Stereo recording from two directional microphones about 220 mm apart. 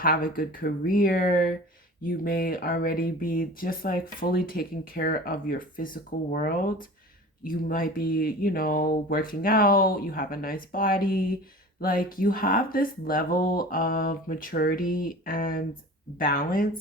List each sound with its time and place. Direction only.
0.0 s speech: 40° left (ahead or behind)